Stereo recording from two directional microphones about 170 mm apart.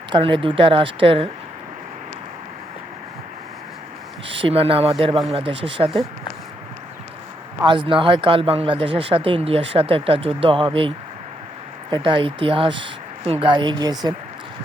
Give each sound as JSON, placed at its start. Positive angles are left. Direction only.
{"t": 0.1, "sound": "speech", "side_deg": -30}
{"t": 4.3, "sound": "speech", "side_deg": -30}
{"t": 7.6, "sound": "speech", "side_deg": -30}